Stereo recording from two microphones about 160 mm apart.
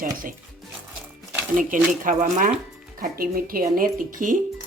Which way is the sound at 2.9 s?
65° right (ahead or behind).